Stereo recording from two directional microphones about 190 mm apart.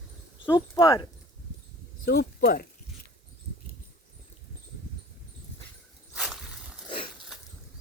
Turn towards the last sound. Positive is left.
turn(degrees=30)  # may be behind; listen again after turning